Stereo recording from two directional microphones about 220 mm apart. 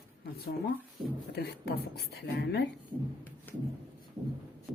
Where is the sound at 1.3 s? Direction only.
45° left (ahead or behind).